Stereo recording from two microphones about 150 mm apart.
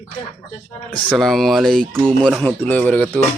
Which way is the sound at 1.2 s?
Centre (ahead or behind).